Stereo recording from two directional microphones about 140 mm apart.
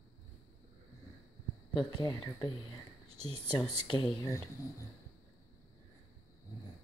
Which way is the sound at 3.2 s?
45° right (ahead or behind).